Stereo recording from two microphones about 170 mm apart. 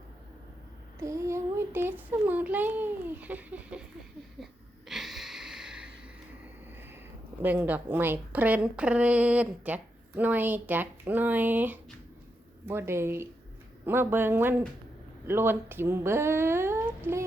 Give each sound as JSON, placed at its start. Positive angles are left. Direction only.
{"t": 0.9, "sound": "a woman's voice", "side_deg": -15}
{"t": 4.9, "sound": "a sound", "side_deg": 0}
{"t": 7.4, "sound": "a woman's voice", "side_deg": -10}